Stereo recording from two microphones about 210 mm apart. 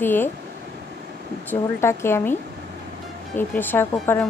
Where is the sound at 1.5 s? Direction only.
10° left (ahead or behind).